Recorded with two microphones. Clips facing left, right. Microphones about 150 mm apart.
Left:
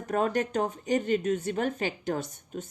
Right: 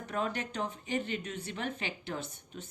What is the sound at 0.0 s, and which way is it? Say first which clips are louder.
Speech: left 8 dB; 45° left (ahead or behind).